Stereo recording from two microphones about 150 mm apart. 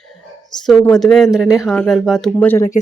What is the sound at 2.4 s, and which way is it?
Speech, 15° left (ahead or behind).